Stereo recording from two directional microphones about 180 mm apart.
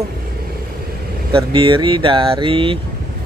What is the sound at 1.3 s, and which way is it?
Speech, 30° right (ahead or behind).